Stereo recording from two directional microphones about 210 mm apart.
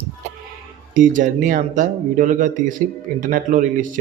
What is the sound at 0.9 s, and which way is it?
Speech, 40° right (ahead or behind).